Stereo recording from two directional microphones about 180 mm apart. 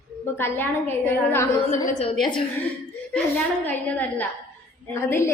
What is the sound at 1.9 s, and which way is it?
Speech, 35° left (ahead or behind).